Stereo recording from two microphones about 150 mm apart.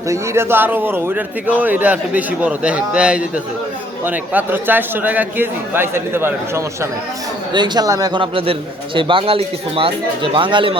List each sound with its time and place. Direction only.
0.1 s a man's voice: 15° right (ahead or behind)
7.5 s speech: 30° right (ahead or behind)